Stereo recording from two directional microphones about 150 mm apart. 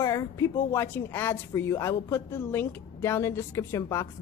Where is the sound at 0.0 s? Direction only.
20° left (ahead or behind).